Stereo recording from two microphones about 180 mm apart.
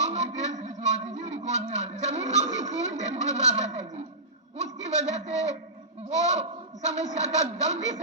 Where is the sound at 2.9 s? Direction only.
40° right (ahead or behind).